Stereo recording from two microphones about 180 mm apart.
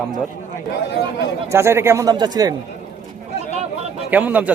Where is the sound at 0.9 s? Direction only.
70° left (ahead or behind).